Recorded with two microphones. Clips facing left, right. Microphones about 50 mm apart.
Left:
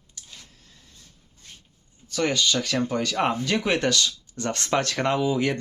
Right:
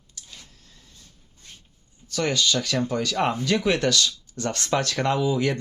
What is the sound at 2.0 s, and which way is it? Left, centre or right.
Speech, left.